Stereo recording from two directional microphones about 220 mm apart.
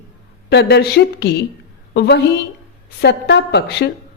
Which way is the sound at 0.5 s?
50° left (ahead or behind).